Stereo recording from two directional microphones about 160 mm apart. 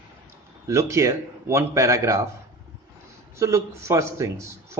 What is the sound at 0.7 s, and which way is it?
Speech, 20° right (ahead or behind).